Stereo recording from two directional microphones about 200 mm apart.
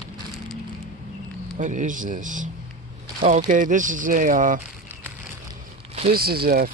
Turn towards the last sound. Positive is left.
turn(degrees=-50)  # may be behind; listen again after turning